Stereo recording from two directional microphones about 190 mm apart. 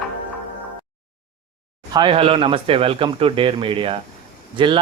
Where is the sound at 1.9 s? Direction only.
25° right (ahead or behind).